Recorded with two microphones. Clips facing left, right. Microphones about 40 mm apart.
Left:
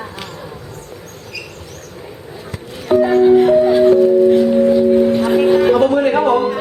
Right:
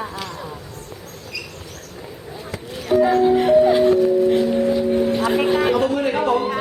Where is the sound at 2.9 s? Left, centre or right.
Centre.